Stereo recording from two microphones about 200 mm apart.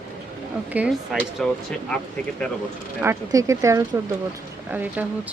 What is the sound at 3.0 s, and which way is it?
Speech, 15° right (ahead or behind).